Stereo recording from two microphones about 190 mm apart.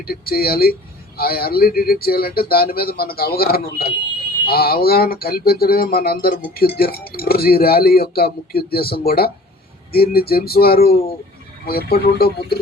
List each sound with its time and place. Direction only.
0.0 s speech: 50° left (ahead or behind)